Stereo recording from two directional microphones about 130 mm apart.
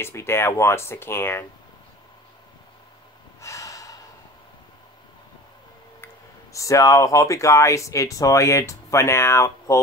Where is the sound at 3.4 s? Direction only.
25° left (ahead or behind).